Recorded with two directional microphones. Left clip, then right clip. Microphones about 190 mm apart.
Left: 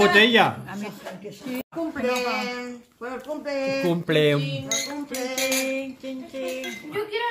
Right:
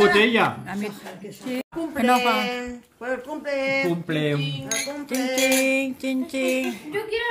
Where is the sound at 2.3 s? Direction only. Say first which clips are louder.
Right 4 dB; 30° right (ahead or behind).